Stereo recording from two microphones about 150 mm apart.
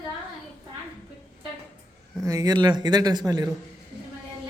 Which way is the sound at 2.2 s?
25° right (ahead or behind).